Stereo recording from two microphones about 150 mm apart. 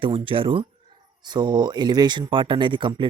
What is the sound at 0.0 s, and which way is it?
Speech, 35° right (ahead or behind).